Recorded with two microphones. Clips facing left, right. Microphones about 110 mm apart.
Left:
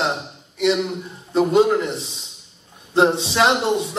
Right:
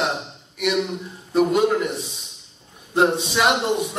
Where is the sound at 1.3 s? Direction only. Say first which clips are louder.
Left 2 dB; 25° left (ahead or behind).